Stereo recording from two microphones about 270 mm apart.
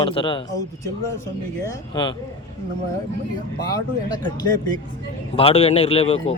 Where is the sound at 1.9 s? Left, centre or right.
Centre.